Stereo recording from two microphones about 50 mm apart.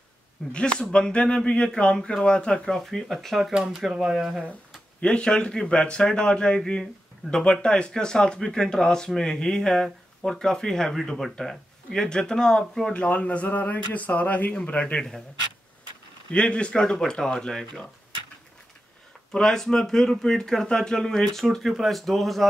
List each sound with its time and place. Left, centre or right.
0.5 s speech: centre
5.0 s speech: centre
12.9 s speech: left
16.3 s speech: left
16.9 s speech: centre
19.3 s speech: centre